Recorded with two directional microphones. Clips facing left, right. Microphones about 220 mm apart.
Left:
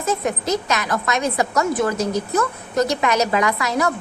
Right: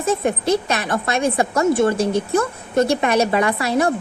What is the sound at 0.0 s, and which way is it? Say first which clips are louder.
A woman's voice: right 3 dB; 30° right (ahead or behind).